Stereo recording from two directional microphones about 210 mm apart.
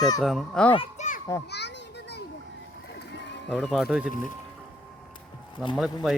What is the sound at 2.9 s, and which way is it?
Run, 55° left (ahead or behind).